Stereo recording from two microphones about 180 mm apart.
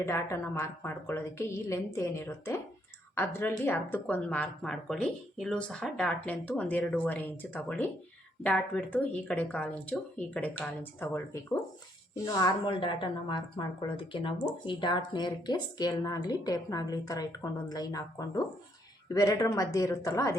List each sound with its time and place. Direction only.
0.0 s a woman's voice: 15° left (ahead or behind)